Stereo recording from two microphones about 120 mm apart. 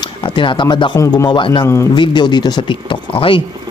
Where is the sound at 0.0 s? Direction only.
45° left (ahead or behind).